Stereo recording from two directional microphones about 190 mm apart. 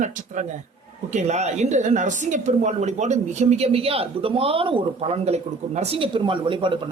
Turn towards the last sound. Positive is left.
turn(degrees=-25)  # may be behind; listen again after turning